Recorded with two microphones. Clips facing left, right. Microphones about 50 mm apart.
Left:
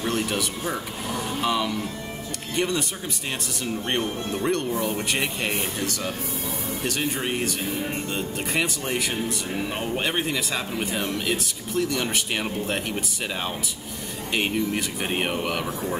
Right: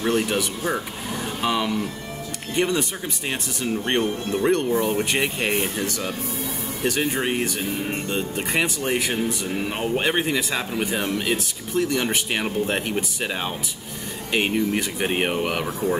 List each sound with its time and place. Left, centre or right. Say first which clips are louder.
0.0 s speech: right 4 dB; centre